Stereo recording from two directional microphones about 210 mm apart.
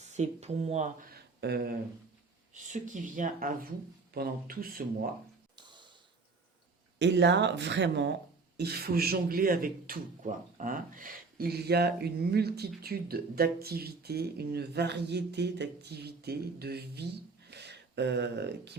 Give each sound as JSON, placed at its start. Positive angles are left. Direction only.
{"t": 0.1, "sound": "speech", "side_deg": -30}
{"t": 1.4, "sound": "speech", "side_deg": -50}
{"t": 2.5, "sound": "speech", "side_deg": -35}
{"t": 7.0, "sound": "speech", "side_deg": -55}